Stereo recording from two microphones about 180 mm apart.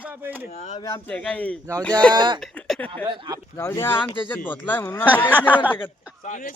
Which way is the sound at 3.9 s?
25° left (ahead or behind).